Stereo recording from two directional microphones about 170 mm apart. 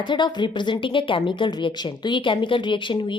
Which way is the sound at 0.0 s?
25° left (ahead or behind).